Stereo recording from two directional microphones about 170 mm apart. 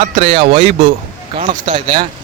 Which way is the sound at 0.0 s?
40° right (ahead or behind).